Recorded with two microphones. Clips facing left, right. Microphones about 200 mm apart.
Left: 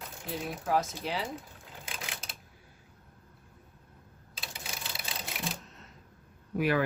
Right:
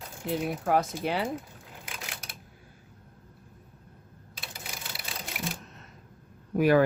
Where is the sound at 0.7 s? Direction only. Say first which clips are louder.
Right 3 dB; 55° right (ahead or behind).